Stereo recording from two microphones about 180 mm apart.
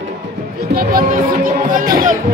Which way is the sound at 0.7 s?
50° right (ahead or behind).